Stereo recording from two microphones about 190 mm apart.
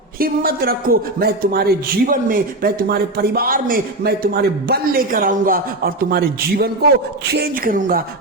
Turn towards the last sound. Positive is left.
turn(degrees=-50)  # may be behind; listen again after turning